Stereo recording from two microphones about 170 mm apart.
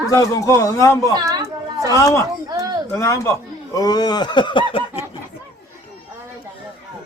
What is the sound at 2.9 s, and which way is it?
A man's voice, 15° left (ahead or behind).